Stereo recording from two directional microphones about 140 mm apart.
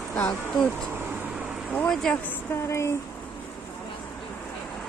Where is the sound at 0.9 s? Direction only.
15° right (ahead or behind).